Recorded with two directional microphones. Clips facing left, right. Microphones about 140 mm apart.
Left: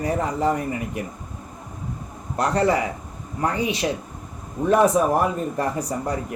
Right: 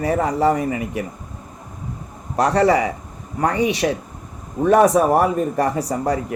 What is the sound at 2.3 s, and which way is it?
Speech, 80° right.